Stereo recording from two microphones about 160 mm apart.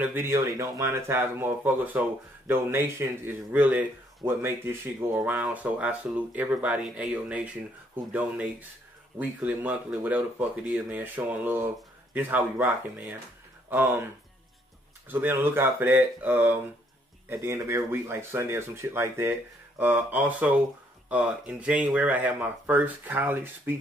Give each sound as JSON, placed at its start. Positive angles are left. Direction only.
{"t": 0.0, "sound": "speech", "side_deg": -15}
{"t": 15.0, "sound": "speech", "side_deg": -15}